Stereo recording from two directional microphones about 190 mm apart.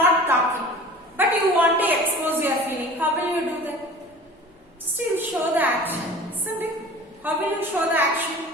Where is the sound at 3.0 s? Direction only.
10° right (ahead or behind).